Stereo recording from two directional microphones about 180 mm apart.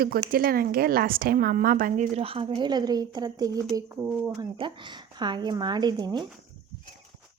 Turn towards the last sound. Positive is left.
turn(degrees=-25)  # may be behind; listen again after turning